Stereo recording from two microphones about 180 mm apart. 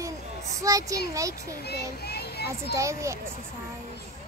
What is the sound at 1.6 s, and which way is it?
A child's voice, 65° left (ahead or behind).